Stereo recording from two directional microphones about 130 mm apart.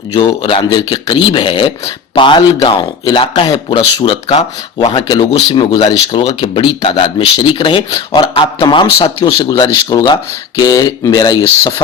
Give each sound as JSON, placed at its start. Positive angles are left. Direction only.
{"t": 0.1, "sound": "speech", "side_deg": 40}